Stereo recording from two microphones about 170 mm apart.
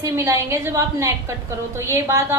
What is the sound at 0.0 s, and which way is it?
A woman's voice, 15° right (ahead or behind).